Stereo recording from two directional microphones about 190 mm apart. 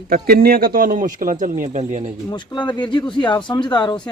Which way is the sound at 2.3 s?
20° left (ahead or behind).